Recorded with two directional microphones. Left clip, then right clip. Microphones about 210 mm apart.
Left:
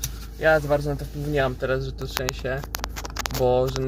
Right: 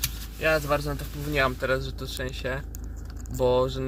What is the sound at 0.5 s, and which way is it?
Speech, 20° right (ahead or behind).